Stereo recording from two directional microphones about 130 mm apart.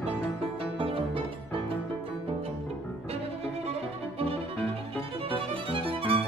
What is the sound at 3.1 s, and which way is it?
Music, 50° right (ahead or behind).